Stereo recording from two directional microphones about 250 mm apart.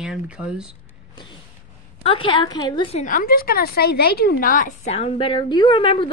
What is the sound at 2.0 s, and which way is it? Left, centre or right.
A woman's voice, left.